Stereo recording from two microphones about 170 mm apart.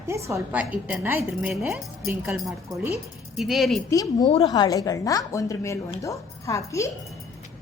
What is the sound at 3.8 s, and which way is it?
A woman's voice, 20° left (ahead or behind).